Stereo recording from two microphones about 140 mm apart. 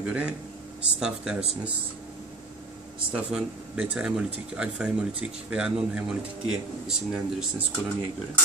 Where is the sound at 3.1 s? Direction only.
10° right (ahead or behind).